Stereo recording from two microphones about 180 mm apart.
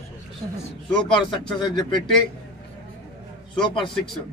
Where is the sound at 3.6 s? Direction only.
25° left (ahead or behind).